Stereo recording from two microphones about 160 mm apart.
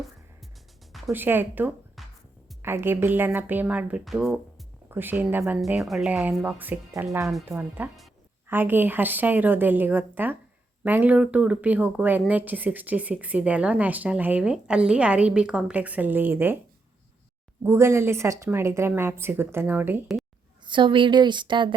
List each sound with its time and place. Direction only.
1.1 s a woman's voice: 10° right (ahead or behind)
2.0 s music: centre (ahead or behind)
2.6 s a woman's voice: 15° right (ahead or behind)
4.9 s a woman's voice: 10° right (ahead or behind)
17.6 s a woman's voice: 15° right (ahead or behind)
20.7 s speech: 30° right (ahead or behind)